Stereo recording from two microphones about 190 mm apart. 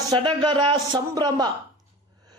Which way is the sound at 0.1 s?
25° right (ahead or behind).